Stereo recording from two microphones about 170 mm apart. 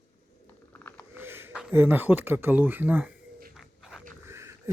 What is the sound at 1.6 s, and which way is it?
Speech, 10° right (ahead or behind).